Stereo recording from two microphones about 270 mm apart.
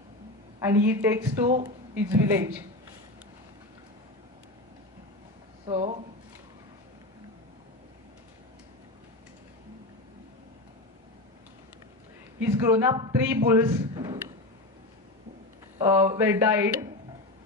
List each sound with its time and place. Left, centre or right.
0.6 s a man's voice: centre
1.4 s speech: right
2.0 s a man's voice: centre
5.7 s speech: right
12.4 s a man's voice: centre
15.8 s a man's voice: centre